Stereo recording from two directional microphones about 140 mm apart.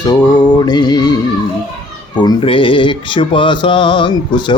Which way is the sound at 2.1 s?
35° left (ahead or behind).